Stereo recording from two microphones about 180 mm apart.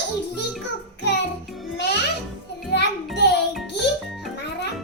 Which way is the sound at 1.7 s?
70° left (ahead or behind).